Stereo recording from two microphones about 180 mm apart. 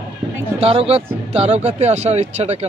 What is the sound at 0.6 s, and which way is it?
Speech, 35° right (ahead or behind).